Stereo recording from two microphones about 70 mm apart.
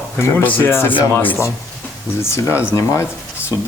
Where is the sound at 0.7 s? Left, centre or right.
Left.